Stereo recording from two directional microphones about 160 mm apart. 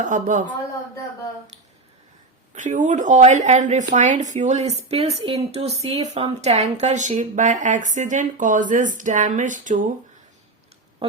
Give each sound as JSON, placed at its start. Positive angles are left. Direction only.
{"t": 0.0, "sound": "speech", "side_deg": -50}
{"t": 2.6, "sound": "speech", "side_deg": -50}